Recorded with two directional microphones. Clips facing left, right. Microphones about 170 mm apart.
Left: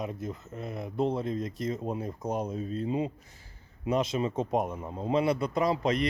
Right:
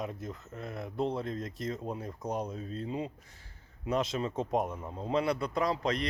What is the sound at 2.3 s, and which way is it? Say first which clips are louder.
Speech: left 3 dB; 5° left (ahead or behind).